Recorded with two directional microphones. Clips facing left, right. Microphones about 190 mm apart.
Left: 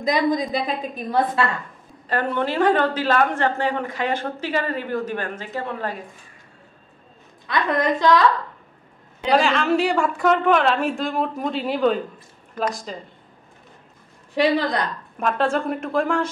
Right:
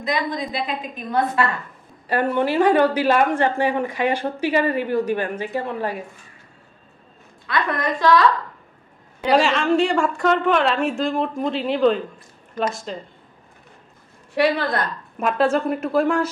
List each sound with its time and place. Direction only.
0.1 s a woman's voice: 40° left (ahead or behind)
1.1 s a woman's voice: 25° left (ahead or behind)
2.0 s a woman's voice: 10° right (ahead or behind)
7.4 s a woman's voice: 20° left (ahead or behind)
9.3 s a woman's voice: centre (ahead or behind)
15.1 s a woman's voice: 5° right (ahead or behind)